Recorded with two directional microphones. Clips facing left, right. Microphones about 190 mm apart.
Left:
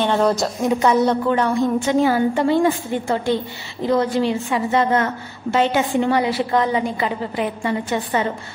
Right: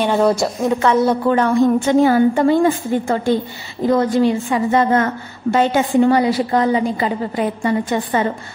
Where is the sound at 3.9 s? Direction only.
50° right (ahead or behind).